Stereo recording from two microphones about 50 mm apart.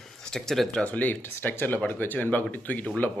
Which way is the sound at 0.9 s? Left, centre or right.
Left.